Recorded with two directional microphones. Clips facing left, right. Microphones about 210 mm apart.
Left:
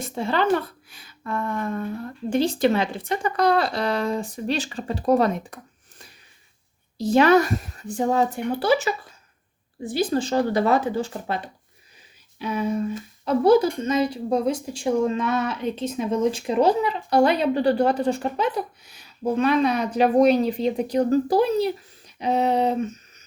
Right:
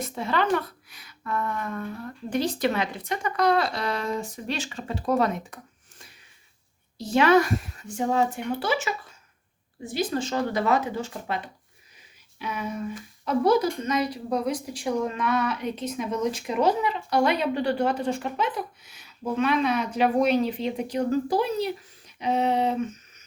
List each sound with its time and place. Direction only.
0.0 s a child's voice: 30° left (ahead or behind)
7.0 s speech: 40° left (ahead or behind)